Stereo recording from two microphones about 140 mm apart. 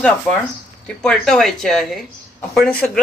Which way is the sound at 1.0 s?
5° left (ahead or behind).